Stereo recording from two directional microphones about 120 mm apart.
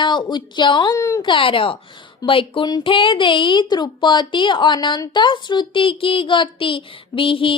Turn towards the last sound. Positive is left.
turn(degrees=45)  # may be behind; listen again after turning